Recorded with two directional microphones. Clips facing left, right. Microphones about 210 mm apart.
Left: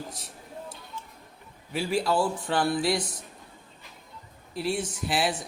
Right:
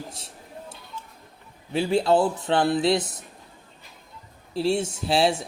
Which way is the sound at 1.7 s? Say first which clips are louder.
Right 5 dB; 25° right (ahead or behind).